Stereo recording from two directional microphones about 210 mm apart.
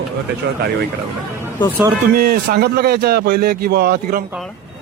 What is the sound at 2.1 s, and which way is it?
Speech, 45° right (ahead or behind).